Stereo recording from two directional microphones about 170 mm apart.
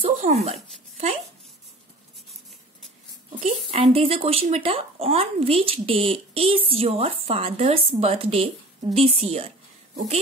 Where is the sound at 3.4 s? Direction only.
35° right (ahead or behind).